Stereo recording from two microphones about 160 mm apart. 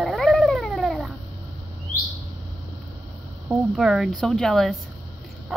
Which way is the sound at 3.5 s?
5° right (ahead or behind).